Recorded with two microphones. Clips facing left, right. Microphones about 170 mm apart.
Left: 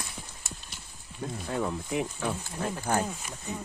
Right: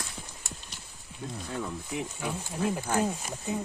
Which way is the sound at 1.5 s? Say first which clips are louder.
Left 5 dB; 65° left (ahead or behind).